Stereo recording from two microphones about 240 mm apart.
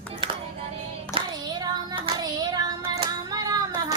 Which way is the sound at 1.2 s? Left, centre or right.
Centre.